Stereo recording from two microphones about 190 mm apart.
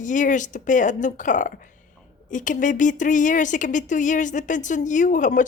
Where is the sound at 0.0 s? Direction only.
40° left (ahead or behind).